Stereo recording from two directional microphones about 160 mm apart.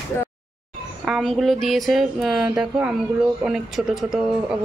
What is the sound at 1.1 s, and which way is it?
Speech, centre (ahead or behind).